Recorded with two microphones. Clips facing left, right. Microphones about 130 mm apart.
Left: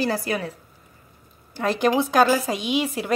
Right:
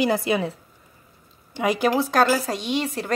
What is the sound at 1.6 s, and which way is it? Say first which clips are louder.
Speech: even; 10° right (ahead or behind).